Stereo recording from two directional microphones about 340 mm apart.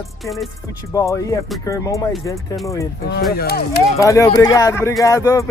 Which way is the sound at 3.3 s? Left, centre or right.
Left.